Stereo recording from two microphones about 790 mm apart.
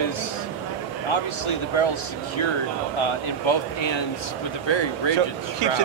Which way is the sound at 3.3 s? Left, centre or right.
Left.